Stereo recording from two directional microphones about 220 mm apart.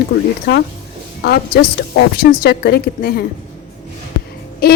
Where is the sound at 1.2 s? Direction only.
45° left (ahead or behind).